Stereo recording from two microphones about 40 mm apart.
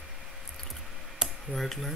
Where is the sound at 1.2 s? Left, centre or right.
Centre.